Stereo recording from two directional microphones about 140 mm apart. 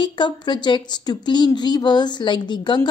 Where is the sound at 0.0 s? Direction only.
35° left (ahead or behind).